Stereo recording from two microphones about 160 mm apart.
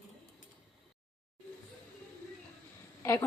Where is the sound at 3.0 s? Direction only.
15° left (ahead or behind).